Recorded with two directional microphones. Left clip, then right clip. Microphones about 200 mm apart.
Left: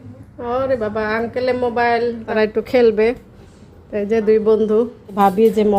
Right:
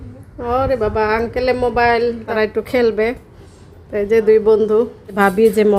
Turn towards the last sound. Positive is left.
turn(degrees=-10)  # may be behind; listen again after turning